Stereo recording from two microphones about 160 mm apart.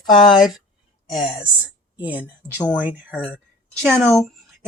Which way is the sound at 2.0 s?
10° right (ahead or behind).